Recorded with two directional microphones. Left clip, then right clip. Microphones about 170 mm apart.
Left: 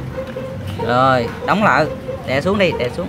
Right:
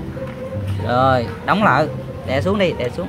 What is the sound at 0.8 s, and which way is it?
Speech, centre (ahead or behind).